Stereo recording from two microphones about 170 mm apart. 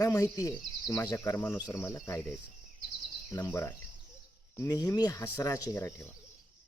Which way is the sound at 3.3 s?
15° left (ahead or behind).